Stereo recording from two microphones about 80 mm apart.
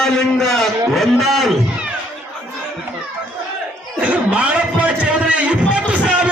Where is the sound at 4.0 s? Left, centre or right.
Centre.